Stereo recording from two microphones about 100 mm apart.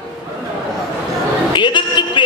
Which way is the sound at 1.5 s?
50° left (ahead or behind).